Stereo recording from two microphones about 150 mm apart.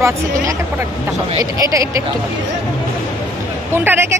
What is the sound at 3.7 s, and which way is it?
Speech, 15° right (ahead or behind).